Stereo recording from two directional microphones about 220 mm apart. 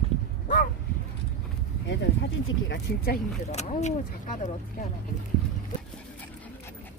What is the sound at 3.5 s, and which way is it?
Speech, 30° left (ahead or behind).